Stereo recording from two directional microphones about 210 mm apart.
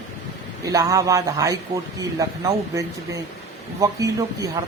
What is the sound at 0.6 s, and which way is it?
A man's voice, 15° right (ahead or behind).